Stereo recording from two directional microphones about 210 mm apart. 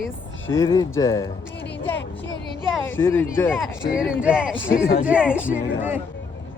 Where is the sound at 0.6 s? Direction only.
15° left (ahead or behind).